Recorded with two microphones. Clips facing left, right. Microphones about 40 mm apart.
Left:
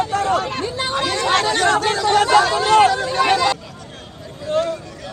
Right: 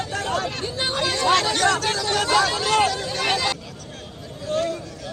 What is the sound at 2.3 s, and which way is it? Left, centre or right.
Hubbub, left.